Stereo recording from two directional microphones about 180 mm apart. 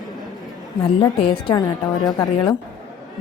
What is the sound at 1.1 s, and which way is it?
A woman's voice, 30° left (ahead or behind).